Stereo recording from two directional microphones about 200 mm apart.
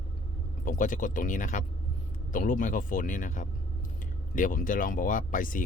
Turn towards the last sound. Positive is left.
turn(degrees=40)  # may be behind; listen again after turning